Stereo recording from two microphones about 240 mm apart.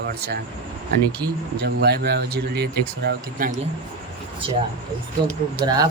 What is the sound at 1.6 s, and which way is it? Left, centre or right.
Speech, right.